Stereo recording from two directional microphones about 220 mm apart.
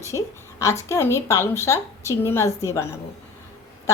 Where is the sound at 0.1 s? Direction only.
20° left (ahead or behind).